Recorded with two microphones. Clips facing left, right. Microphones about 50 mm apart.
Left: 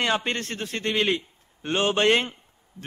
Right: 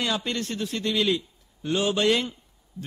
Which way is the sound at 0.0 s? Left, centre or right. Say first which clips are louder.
Left 3 dB; left.